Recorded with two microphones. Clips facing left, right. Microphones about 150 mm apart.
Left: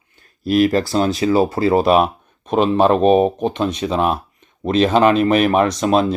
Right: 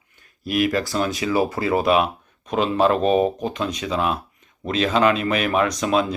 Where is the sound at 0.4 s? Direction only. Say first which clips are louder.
Left 6 dB; 35° left (ahead or behind).